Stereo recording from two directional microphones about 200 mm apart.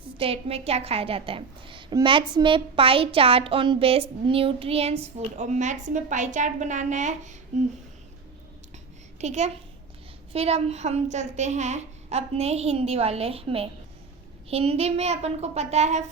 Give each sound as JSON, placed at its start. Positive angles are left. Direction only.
{"t": 0.2, "sound": "a woman's voice", "side_deg": -30}
{"t": 9.2, "sound": "a child's voice", "side_deg": -35}